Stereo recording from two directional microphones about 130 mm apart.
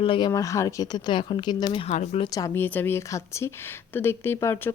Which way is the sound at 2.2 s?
30° left (ahead or behind).